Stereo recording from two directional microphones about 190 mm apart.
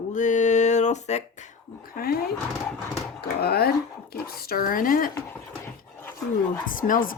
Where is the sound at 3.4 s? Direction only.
55° left (ahead or behind).